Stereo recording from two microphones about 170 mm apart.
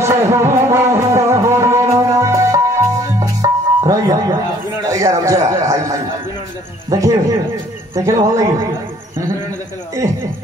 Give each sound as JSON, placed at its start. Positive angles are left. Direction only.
{"t": 0.0, "sound": "music", "side_deg": -15}
{"t": 4.9, "sound": "speech", "side_deg": -20}